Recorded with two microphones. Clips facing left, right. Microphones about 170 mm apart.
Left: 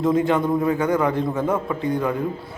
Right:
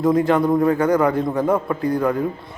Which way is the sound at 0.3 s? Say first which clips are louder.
Right 3 dB; centre (ahead or behind).